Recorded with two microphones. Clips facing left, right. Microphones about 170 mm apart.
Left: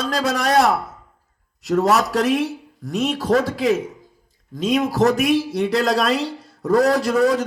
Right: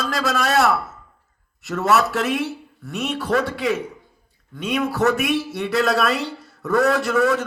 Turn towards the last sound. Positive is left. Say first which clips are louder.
# left 2 dB
turn(degrees=30)  # may be behind; listen again after turning